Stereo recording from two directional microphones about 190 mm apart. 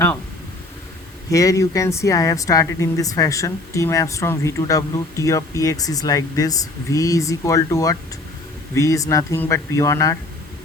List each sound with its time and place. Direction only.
1.3 s speech: 15° left (ahead or behind)